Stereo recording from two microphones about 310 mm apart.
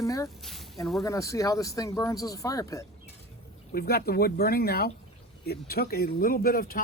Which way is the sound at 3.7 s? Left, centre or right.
Left.